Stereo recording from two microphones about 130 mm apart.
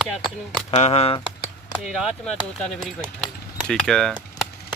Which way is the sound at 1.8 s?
Centre (ahead or behind).